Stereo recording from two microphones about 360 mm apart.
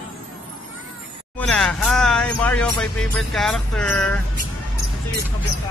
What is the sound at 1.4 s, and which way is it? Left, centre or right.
Speech, centre.